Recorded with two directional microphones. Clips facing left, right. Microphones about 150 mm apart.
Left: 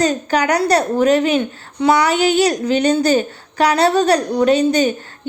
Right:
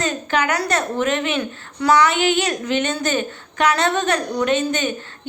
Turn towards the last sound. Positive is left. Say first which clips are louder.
# left 6 dB
turn(degrees=35)  # may be behind; listen again after turning